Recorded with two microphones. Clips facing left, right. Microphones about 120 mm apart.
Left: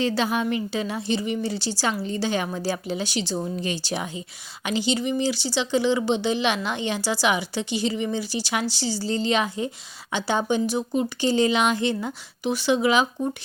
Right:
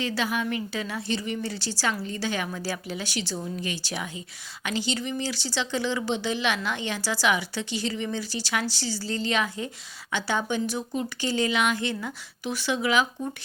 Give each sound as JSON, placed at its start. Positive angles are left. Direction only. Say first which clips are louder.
{"t": 0.0, "sound": "speech", "louder": "left 4 dB", "side_deg": 25}